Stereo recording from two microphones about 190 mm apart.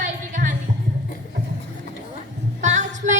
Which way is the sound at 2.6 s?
40° right (ahead or behind).